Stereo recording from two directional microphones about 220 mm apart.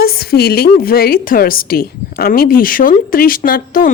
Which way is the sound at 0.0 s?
45° left (ahead or behind).